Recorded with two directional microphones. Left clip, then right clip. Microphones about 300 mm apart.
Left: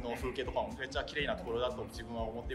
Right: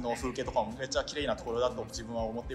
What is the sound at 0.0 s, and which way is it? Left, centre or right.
Speech, centre.